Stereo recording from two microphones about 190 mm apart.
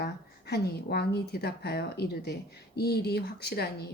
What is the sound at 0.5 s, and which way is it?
A woman's voice, 55° left (ahead or behind).